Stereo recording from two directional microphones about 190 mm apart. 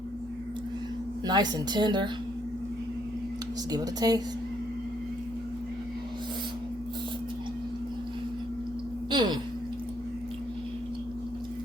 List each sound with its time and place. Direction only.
1.3 s a woman's voice: 20° right (ahead or behind)
3.7 s a woman's voice: 20° right (ahead or behind)
9.0 s a sound: 25° right (ahead or behind)